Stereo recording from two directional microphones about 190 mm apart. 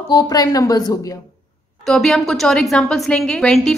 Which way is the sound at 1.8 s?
Centre (ahead or behind).